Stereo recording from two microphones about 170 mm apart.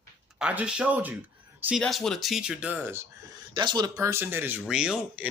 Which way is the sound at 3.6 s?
25° right (ahead or behind).